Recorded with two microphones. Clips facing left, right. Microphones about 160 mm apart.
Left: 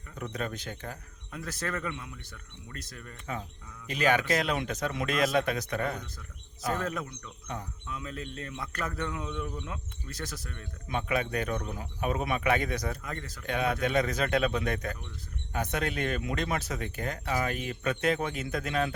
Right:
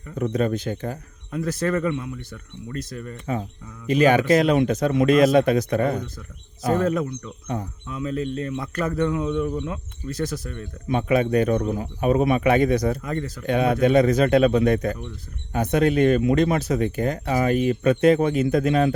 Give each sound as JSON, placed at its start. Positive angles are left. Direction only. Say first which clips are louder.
{"t": 0.3, "sound": "speech", "louder": "right 12 dB", "side_deg": -20}
{"t": 3.3, "sound": "speech", "louder": "right 9 dB", "side_deg": -25}
{"t": 8.5, "sound": "speech", "louder": "right 9 dB", "side_deg": -25}
{"t": 9.4, "sound": "speech", "louder": "right 11 dB", "side_deg": -45}
{"t": 10.1, "sound": "speech", "louder": "right 13 dB", "side_deg": -15}
{"t": 10.3, "sound": "speech", "louder": "right 11 dB", "side_deg": -25}
{"t": 12.7, "sound": "speech", "louder": "right 12 dB", "side_deg": -40}
{"t": 13.1, "sound": "speech", "louder": "right 11 dB", "side_deg": -20}